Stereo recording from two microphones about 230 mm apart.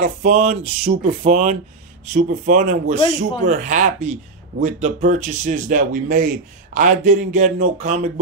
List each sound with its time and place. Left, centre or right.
0.0 s speech: right